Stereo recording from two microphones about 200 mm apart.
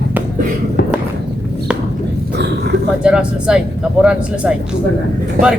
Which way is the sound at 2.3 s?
55° right (ahead or behind).